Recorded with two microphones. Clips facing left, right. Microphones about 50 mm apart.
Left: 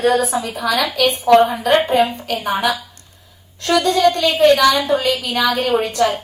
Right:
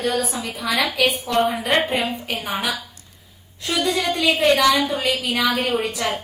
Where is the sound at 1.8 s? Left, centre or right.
Left.